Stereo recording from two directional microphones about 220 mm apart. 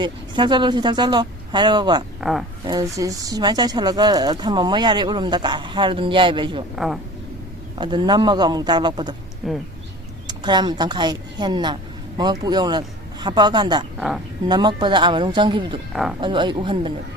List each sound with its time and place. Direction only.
0.0 s speech: 20° right (ahead or behind)
6.7 s speech: centre (ahead or behind)
7.8 s speech: 20° right (ahead or behind)
9.4 s speech: centre (ahead or behind)
10.2 s speech: 20° right (ahead or behind)
15.9 s speech: centre (ahead or behind)
16.2 s speech: 20° right (ahead or behind)